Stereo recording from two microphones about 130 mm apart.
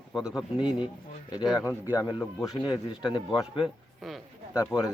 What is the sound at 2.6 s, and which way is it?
Speech, 35° left (ahead or behind).